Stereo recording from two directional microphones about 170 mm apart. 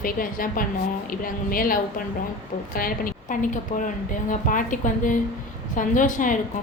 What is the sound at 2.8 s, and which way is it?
A woman's voice, 55° left (ahead or behind).